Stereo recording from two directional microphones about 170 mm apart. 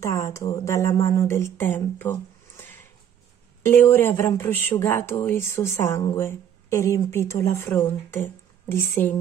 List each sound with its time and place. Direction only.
0.0 s speech: 15° left (ahead or behind)